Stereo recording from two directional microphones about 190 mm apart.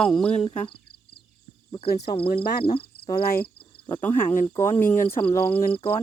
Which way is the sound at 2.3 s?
55° left (ahead or behind).